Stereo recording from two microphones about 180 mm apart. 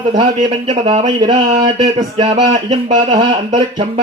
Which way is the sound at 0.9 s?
25° right (ahead or behind).